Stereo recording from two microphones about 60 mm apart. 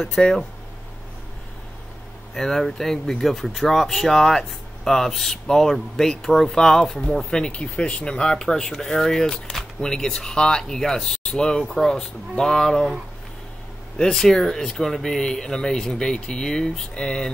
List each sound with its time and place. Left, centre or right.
0.0 s speech: centre
2.3 s speech: centre
13.9 s speech: centre